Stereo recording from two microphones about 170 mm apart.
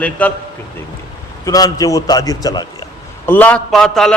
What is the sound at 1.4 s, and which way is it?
A man's voice, 20° left (ahead or behind).